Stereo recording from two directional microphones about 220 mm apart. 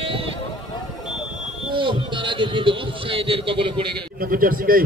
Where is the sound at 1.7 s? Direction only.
20° right (ahead or behind).